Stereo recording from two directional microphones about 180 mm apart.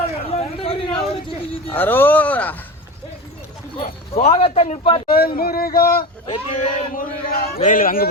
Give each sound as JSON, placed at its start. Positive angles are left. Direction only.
{"t": 0.3, "sound": "a sound", "side_deg": 35}
{"t": 1.7, "sound": "speech", "side_deg": 10}
{"t": 4.1, "sound": "a man's voice", "side_deg": 35}
{"t": 5.1, "sound": "speech", "side_deg": 55}
{"t": 6.2, "sound": "speech", "side_deg": 25}
{"t": 6.9, "sound": "speech", "side_deg": 55}